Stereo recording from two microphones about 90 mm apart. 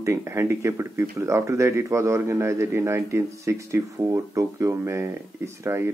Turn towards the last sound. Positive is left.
turn(degrees=-30)  # may be behind; listen again after turning